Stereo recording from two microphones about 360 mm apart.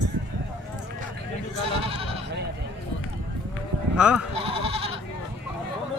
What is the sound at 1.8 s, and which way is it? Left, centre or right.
Bleat, centre.